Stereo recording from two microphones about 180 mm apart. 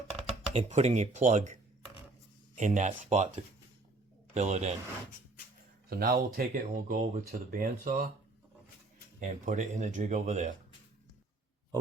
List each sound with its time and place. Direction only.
0.3 s speech: 40° right (ahead or behind)
2.6 s speech: 45° right (ahead or behind)
5.9 s speech: 55° right (ahead or behind)
9.2 s speech: 40° right (ahead or behind)